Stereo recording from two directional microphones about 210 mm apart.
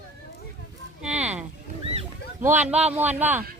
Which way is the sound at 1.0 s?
5° right (ahead or behind).